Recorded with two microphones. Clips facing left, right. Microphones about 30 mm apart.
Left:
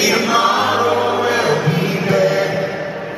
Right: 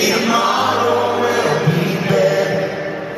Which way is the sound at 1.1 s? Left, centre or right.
Centre.